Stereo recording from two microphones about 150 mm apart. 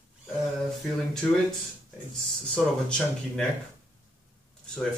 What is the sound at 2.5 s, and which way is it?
Speech, 5° left (ahead or behind).